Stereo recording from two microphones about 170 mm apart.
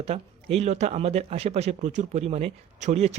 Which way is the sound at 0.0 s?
35° right (ahead or behind).